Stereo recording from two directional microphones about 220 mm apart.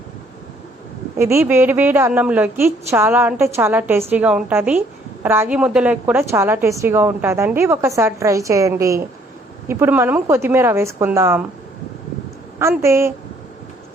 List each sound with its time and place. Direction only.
1.2 s a woman's voice: 10° right (ahead or behind)
12.5 s a woman's voice: 10° right (ahead or behind)